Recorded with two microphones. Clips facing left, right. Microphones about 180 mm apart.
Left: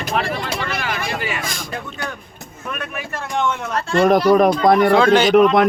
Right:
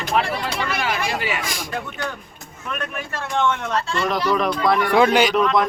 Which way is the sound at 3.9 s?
50° left (ahead or behind).